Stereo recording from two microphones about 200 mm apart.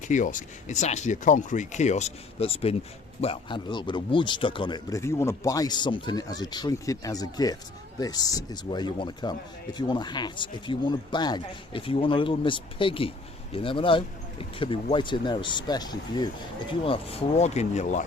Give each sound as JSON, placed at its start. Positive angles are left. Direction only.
{"t": 0.1, "sound": "speech", "side_deg": 40}